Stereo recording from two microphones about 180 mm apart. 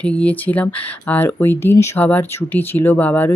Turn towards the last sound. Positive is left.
turn(degrees=10)  # may be behind; listen again after turning